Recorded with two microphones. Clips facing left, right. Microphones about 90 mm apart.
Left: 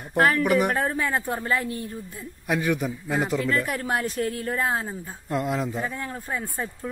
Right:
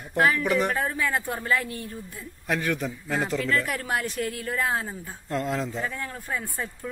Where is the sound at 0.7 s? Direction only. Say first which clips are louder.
Left 2 dB; 40° left (ahead or behind).